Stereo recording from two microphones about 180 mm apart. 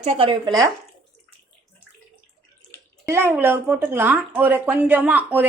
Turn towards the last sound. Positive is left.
turn(degrees=-10)  # may be behind; listen again after turning